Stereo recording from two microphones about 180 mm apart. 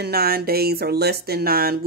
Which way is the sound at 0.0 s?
60° right (ahead or behind).